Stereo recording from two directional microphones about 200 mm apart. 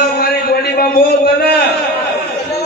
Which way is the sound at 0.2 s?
50° left (ahead or behind).